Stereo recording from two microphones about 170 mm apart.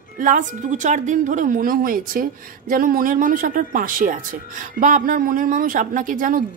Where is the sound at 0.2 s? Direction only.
50° right (ahead or behind).